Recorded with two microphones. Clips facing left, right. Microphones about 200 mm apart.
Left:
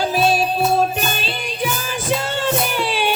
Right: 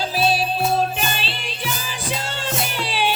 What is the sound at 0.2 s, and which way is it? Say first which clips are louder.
Music: left 2 dB; 50° left (ahead or behind).